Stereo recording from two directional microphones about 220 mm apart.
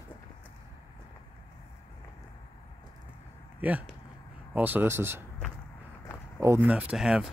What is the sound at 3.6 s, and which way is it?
Speech, 5° right (ahead or behind).